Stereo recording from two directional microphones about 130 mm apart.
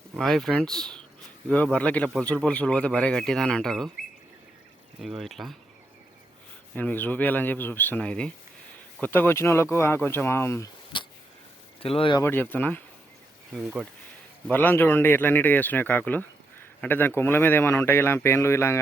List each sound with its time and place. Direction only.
0.2 s speech: 5° left (ahead or behind)
4.9 s speech: centre (ahead or behind)
6.7 s speech: 15° left (ahead or behind)
10.9 s a sound: 40° left (ahead or behind)
11.8 s speech: 45° left (ahead or behind)
12.2 s speech: 15° left (ahead or behind)
13.5 s speech: 5° right (ahead or behind)
14.5 s speech: 15° left (ahead or behind)